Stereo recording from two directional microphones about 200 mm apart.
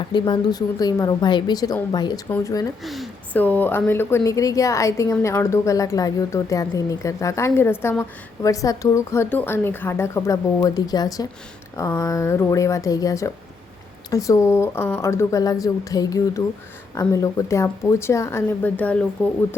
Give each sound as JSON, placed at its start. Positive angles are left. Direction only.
{"t": 0.1, "sound": "a woman's voice", "side_deg": 20}
{"t": 2.8, "sound": "a woman's voice", "side_deg": 0}